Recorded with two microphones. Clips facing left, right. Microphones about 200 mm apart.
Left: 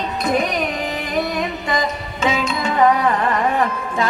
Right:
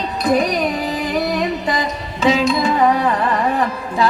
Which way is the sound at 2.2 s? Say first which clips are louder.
Right 5 dB; 35° right (ahead or behind).